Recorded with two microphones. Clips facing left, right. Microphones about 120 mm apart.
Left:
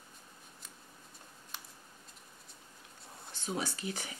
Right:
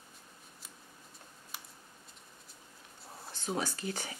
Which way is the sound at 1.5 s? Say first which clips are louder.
Even; 5° right (ahead or behind).